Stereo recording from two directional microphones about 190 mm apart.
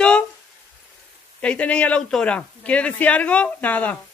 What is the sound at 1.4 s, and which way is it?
Speech, 5° left (ahead or behind).